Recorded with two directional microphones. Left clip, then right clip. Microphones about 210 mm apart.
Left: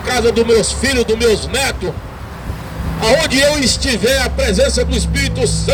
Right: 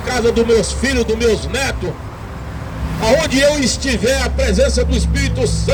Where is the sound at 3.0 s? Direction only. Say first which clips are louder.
Left 1 dB; 15° left (ahead or behind).